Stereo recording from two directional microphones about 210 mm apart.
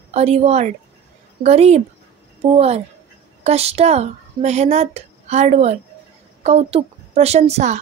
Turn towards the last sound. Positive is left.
turn(degrees=-30)  # may be behind; listen again after turning